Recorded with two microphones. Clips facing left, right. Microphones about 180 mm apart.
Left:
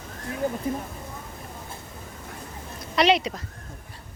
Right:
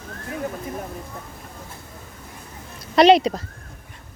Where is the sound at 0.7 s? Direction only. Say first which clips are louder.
Left 3 dB; 30° left (ahead or behind).